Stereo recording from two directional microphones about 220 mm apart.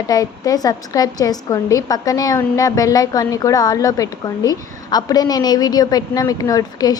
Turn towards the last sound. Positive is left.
turn(degrees=15)  # may be behind; listen again after turning